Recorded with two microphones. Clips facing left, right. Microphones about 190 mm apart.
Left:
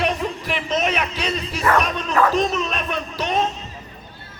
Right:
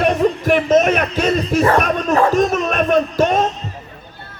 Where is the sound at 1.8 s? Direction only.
50° right (ahead or behind).